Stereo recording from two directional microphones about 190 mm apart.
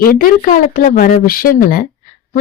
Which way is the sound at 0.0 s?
50° left (ahead or behind).